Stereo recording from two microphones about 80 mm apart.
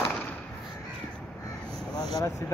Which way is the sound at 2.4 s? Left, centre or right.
Left.